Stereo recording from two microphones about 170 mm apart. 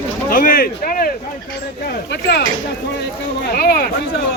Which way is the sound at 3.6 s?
60° left (ahead or behind).